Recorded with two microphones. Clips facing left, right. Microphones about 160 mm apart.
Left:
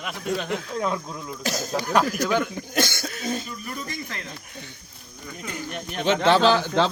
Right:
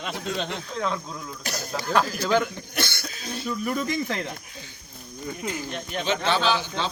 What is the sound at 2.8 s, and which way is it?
Cough, 45° left (ahead or behind).